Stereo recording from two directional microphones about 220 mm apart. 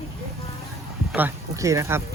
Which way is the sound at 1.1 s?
10° right (ahead or behind).